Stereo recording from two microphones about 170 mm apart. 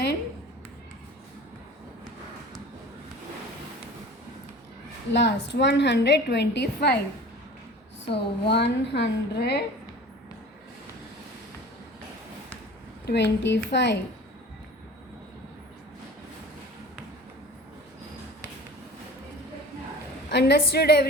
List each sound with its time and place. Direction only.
5.1 s a woman's voice: 90° left
8.1 s a woman's voice: 80° left
13.1 s a woman's voice: 90° left
20.3 s a woman's voice: 75° left (ahead or behind)